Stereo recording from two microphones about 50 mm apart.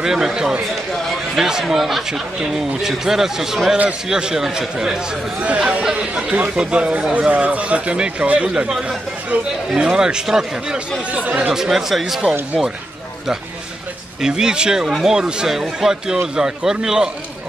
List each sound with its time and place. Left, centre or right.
0.0 s a man's voice: centre
5.4 s speech: right
5.8 s a man's voice: centre
11.1 s speech: right
11.5 s a man's voice: centre
14.2 s a man's voice: centre